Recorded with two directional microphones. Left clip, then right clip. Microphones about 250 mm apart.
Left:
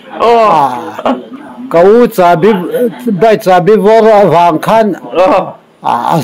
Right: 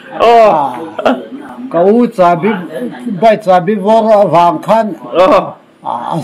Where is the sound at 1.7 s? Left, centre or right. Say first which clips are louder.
Left 4 dB; left.